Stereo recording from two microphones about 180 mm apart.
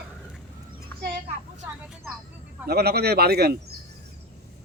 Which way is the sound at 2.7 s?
60° right (ahead or behind).